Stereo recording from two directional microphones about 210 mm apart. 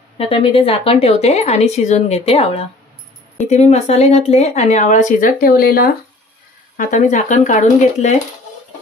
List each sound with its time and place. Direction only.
0.2 s a woman's voice: 25° left (ahead or behind)